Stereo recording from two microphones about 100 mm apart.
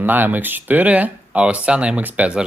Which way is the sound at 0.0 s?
20° right (ahead or behind).